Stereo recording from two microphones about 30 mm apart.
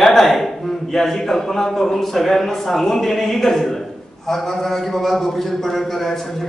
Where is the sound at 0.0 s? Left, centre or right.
Centre.